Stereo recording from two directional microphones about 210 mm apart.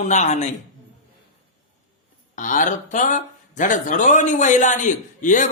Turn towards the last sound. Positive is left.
turn(degrees=35)  # may be behind; listen again after turning